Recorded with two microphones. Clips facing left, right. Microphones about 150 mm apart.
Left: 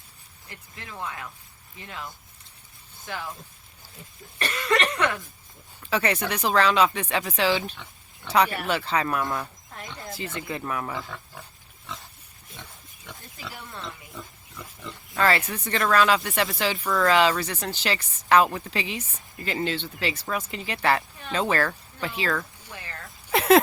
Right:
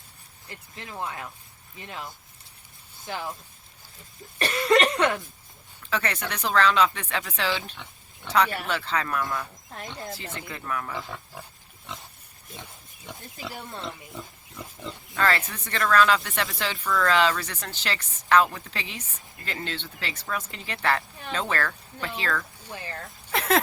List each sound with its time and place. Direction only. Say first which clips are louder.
0.8 s speech: right 1 dB; 25° right (ahead or behind)
4.5 s speech: right 4 dB; 35° right (ahead or behind)
5.9 s speech: left 4 dB; 10° left (ahead or behind)
15.1 s a sound: left 2 dB; 20° left (ahead or behind)
15.4 s speech: left 3 dB; 10° left (ahead or behind)
22.7 s a sound: right 5 dB; 30° right (ahead or behind)